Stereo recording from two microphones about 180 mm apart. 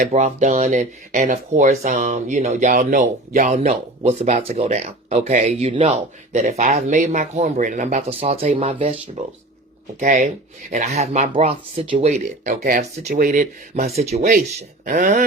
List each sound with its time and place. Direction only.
0.1 s speech: 40° right (ahead or behind)
10.0 s speech: 50° right (ahead or behind)